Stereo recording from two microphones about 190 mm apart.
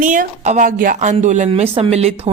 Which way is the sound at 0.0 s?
45° right (ahead or behind).